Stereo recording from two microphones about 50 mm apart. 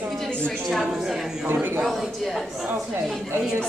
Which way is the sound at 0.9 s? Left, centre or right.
Centre.